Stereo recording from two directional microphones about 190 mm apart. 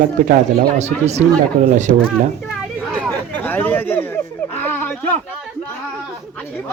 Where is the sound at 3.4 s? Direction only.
10° left (ahead or behind).